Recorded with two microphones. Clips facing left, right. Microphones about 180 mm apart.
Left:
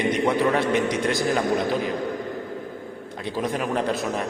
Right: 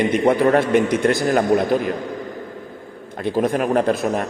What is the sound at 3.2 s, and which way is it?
A man's voice, 50° right (ahead or behind).